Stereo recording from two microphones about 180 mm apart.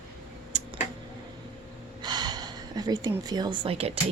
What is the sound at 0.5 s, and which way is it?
Tick-tock, 40° right (ahead or behind).